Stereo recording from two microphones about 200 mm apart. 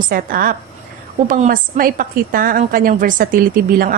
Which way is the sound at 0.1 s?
45° right (ahead or behind).